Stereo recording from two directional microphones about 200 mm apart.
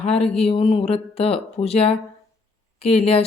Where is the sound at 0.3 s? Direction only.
30° left (ahead or behind).